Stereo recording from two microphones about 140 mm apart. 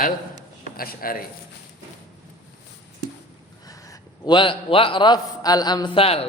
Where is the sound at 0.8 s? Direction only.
90° left.